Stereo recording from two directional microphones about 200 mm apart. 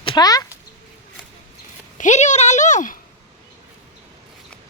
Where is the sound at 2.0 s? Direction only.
35° left (ahead or behind).